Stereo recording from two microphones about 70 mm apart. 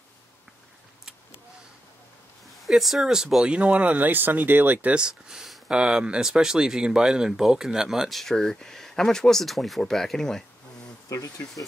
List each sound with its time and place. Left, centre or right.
2.4 s speech: centre
3.5 s speech: centre
4.9 s speech: centre
8.2 s speech: centre
11.1 s speech: left